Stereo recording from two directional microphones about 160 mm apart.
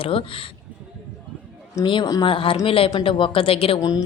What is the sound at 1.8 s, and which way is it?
Speech, 30° left (ahead or behind).